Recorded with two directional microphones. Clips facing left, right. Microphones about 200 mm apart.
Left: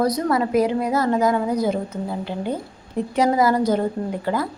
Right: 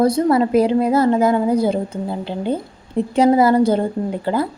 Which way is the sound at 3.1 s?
30° right (ahead or behind).